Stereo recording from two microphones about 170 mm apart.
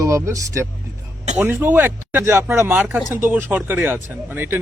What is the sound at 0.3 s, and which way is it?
Speech, 15° right (ahead or behind).